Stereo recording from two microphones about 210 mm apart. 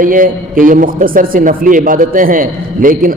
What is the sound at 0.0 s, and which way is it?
A man's voice, 40° right (ahead or behind).